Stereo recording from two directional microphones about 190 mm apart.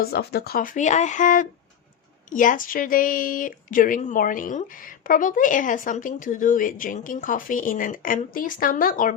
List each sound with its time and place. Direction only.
0.0 s speech: 55° left (ahead or behind)